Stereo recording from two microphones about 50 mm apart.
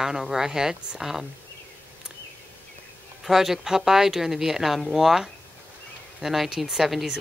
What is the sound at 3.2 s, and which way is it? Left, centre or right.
Speech, centre.